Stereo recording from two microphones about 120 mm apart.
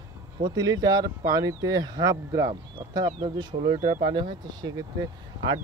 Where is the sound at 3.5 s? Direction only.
85° right.